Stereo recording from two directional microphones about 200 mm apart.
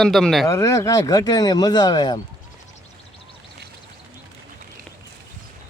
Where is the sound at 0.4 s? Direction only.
15° left (ahead or behind).